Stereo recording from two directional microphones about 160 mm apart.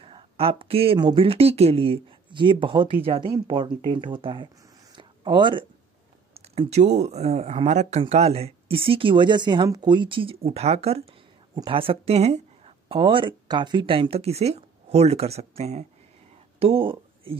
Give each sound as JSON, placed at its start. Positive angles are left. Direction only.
{"t": 0.0, "sound": "speech", "side_deg": -35}
{"t": 4.9, "sound": "a sound", "side_deg": -30}
{"t": 6.3, "sound": "speech", "side_deg": -40}